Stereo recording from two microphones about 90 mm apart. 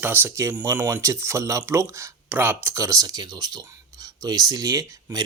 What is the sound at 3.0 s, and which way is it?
Speech, 45° right (ahead or behind).